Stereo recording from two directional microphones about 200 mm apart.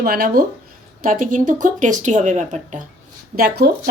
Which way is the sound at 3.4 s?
50° right (ahead or behind).